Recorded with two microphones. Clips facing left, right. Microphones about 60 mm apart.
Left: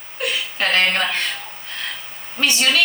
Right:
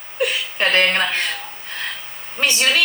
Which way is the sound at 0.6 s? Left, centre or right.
Right.